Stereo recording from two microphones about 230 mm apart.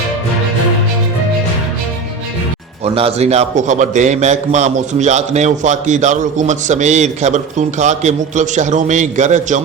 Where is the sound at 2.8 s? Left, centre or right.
Right.